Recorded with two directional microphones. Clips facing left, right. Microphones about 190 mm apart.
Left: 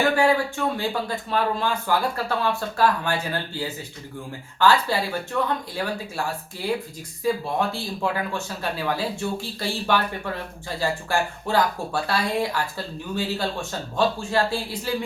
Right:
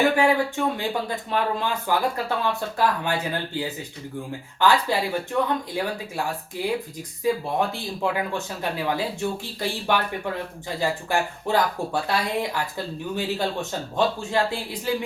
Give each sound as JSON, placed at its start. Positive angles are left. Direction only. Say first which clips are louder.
{"t": 0.2, "sound": "speech", "louder": "even", "side_deg": -20}
{"t": 4.6, "sound": "speech", "louder": "left 1 dB", "side_deg": -15}
{"t": 7.7, "sound": "speech", "louder": "even", "side_deg": -20}